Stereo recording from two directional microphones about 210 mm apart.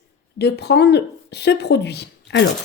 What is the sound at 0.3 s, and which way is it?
Speech, 50° left (ahead or behind).